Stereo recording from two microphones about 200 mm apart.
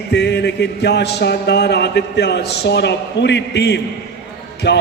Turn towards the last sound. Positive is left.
turn(degrees=55)  # may be behind; listen again after turning